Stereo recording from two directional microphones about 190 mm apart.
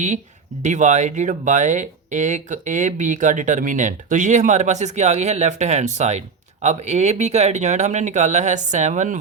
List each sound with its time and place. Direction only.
0.6 s speech: 40° right (ahead or behind)